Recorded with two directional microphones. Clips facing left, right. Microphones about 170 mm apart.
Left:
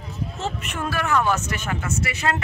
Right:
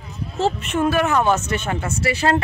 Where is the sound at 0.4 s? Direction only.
25° right (ahead or behind).